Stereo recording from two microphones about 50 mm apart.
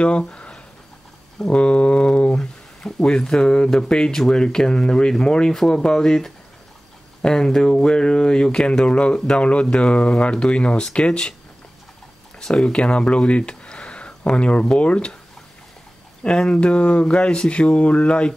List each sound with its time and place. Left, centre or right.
0.2 s a sound: centre
1.5 s speech: left
12.4 s speech: centre
12.7 s speech: centre
16.2 s speech: centre